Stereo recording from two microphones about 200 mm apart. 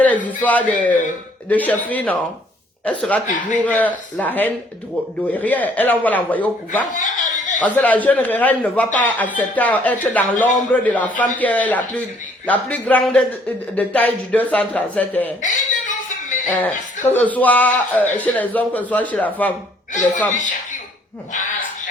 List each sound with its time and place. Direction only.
0.0 s speech: 10° left (ahead or behind)
6.9 s chuckle: 40° left (ahead or behind)
7.6 s speech: 10° left (ahead or behind)
15.4 s a sound: 40° left (ahead or behind)
16.5 s speech: 10° left (ahead or behind)
19.9 s speech: 40° left (ahead or behind)